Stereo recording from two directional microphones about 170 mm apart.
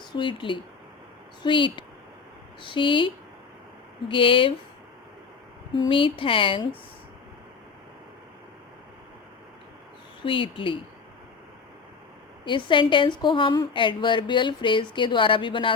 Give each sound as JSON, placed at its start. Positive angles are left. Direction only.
{"t": 0.2, "sound": "a woman's voice", "side_deg": 30}
{"t": 4.1, "sound": "speech", "side_deg": 30}
{"t": 5.7, "sound": "speech", "side_deg": 30}
{"t": 10.2, "sound": "speech", "side_deg": 30}
{"t": 12.5, "sound": "a woman's voice", "side_deg": 30}